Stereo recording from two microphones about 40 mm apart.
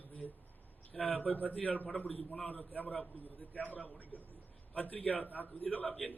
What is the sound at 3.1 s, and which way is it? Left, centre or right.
A man's voice, left.